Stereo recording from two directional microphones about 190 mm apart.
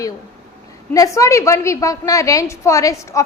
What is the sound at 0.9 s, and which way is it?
A woman's voice, 15° left (ahead or behind).